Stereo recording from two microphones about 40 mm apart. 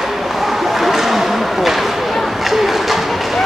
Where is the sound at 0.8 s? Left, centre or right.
Centre.